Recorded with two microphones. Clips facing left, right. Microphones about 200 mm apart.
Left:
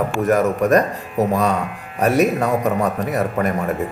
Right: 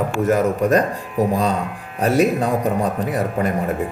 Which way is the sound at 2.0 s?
30° right (ahead or behind).